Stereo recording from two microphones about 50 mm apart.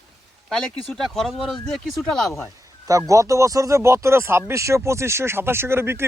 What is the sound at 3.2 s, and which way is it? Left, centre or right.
Speech, right.